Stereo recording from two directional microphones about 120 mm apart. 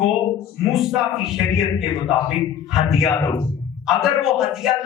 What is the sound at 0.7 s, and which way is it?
Speech, 5° right (ahead or behind).